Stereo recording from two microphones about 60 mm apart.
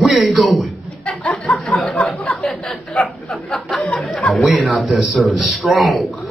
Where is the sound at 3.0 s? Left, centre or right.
Centre.